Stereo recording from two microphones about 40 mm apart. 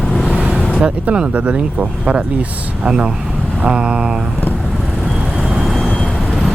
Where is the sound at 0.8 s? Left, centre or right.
Right.